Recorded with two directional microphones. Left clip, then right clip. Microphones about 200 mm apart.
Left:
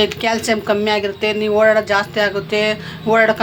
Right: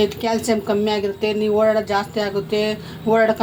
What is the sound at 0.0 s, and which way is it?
A woman's voice, 5° left (ahead or behind).